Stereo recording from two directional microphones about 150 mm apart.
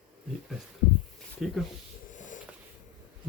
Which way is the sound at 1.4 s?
Centre (ahead or behind).